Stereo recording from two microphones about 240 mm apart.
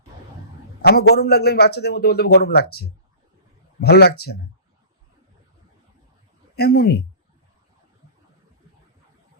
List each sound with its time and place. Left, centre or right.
0.8 s a man's voice: left
6.6 s a man's voice: left